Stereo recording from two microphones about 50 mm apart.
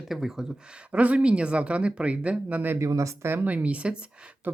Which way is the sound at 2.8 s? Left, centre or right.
Right.